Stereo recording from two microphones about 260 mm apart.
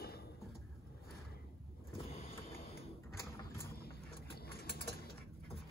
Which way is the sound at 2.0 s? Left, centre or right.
Left.